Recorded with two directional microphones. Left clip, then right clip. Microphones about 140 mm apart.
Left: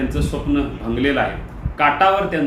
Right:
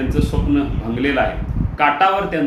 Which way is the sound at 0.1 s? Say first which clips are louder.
Right 2 dB; 5° left (ahead or behind).